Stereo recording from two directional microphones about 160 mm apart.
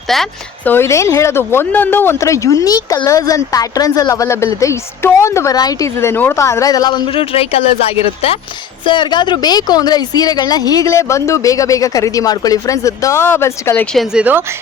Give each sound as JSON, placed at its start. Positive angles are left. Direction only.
{"t": 0.1, "sound": "a woman's voice", "side_deg": 0}
{"t": 0.7, "sound": "speech", "side_deg": 15}
{"t": 13.9, "sound": "a woman's voice", "side_deg": 0}